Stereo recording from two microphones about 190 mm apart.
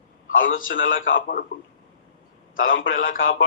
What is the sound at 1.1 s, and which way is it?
Speech, 50° left (ahead or behind).